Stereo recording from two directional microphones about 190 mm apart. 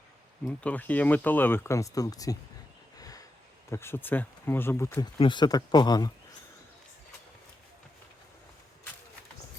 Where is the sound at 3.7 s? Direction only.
15° left (ahead or behind).